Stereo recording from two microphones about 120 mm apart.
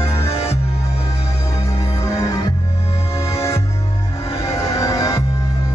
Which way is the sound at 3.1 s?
55° left (ahead or behind).